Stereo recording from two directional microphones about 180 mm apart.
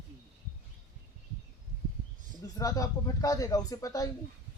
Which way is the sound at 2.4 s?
20° left (ahead or behind).